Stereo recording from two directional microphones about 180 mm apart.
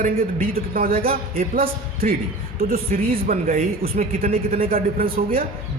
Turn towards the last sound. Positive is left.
turn(degrees=-55)  # may be behind; listen again after turning